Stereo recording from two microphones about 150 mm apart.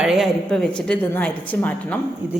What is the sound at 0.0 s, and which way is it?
A woman's voice, centre (ahead or behind).